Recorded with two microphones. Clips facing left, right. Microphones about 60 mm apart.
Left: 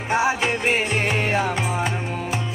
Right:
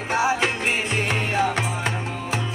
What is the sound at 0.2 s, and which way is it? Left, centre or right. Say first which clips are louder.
Music: right 1 dB; centre.